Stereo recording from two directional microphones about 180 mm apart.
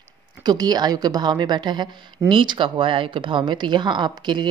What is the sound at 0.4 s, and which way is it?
A woman's voice, 20° right (ahead or behind).